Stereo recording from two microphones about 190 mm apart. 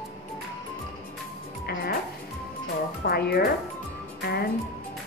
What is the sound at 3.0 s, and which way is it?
Speech, 55° left (ahead or behind).